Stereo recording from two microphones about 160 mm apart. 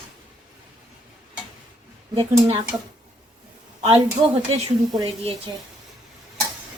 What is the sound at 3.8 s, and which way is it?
A woman's voice, 35° right (ahead or behind).